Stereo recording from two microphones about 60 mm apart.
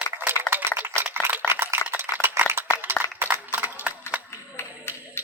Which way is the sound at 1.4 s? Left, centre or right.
Right.